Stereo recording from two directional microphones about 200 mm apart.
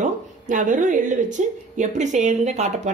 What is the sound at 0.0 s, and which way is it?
Speech, 40° right (ahead or behind).